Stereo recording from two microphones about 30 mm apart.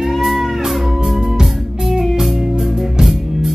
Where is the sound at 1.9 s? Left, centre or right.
Centre.